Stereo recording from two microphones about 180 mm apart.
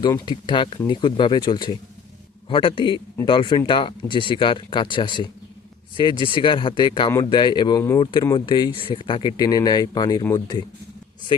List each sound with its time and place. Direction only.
0.0 s speech: 25° left (ahead or behind)